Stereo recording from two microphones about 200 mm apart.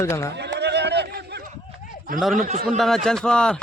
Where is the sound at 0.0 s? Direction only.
15° left (ahead or behind).